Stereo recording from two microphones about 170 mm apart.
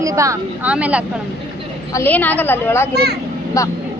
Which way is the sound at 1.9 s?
10° left (ahead or behind).